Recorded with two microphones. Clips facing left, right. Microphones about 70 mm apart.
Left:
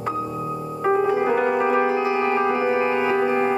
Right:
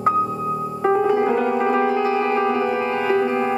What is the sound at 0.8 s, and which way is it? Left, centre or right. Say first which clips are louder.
Piano: right 2 dB; centre.